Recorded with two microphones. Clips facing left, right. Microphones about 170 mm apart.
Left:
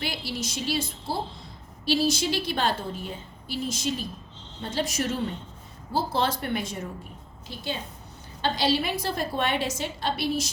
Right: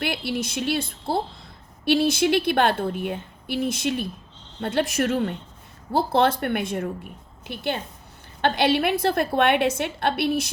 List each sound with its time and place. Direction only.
0.0 s a woman's voice: 60° right (ahead or behind)